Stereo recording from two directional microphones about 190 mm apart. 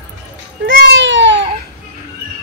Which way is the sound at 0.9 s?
80° right.